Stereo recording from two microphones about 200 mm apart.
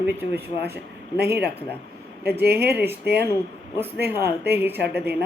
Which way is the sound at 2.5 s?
55° right (ahead or behind).